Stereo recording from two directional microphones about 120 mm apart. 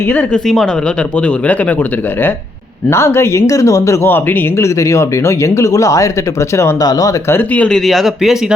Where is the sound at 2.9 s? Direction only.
20° left (ahead or behind).